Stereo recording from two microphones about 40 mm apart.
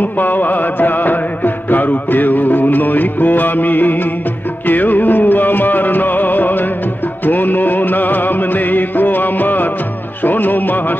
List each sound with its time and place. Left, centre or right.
0.0 s music: left